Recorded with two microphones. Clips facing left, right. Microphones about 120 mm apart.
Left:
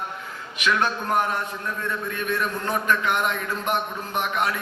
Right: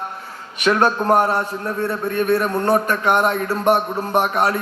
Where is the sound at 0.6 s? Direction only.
40° right (ahead or behind).